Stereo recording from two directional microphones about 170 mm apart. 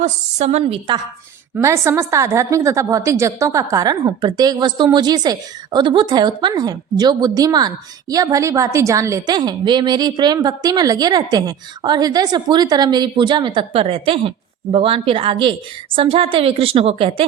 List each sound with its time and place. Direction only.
0.0 s a woman's voice: 40° right (ahead or behind)
1.5 s a woman's voice: 15° right (ahead or behind); by 17.2 s 30° right (ahead or behind)